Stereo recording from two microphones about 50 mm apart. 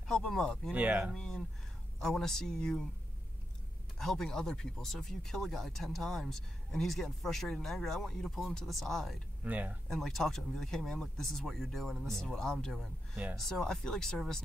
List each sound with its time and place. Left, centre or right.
0.1 s speech: centre
0.7 s speech: right
1.1 s speech: centre
4.0 s speech: centre
9.4 s speech: right
9.8 s speech: centre
12.7 s speech: centre
13.4 s speech: centre